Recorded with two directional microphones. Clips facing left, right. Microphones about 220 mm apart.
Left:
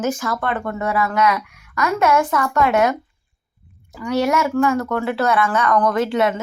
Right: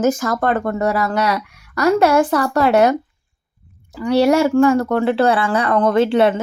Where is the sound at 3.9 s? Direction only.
30° right (ahead or behind).